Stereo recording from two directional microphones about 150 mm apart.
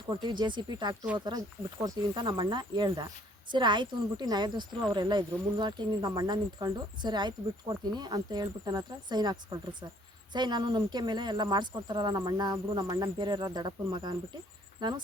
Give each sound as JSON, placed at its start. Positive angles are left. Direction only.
{"t": 0.1, "sound": "speech", "side_deg": -30}